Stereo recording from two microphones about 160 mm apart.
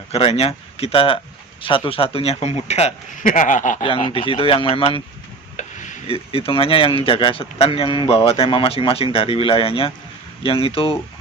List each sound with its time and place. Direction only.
0.1 s speech: 40° left (ahead or behind)
3.8 s speech: 35° left (ahead or behind)